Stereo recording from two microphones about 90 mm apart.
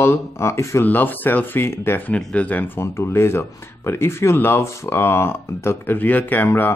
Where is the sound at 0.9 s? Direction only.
20° left (ahead or behind).